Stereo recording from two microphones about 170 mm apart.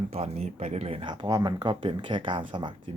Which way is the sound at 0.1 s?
40° right (ahead or behind).